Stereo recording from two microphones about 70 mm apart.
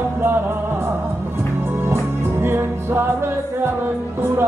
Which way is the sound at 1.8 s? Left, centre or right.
Right.